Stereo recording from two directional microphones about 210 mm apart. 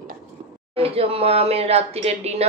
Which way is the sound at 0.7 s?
25° right (ahead or behind).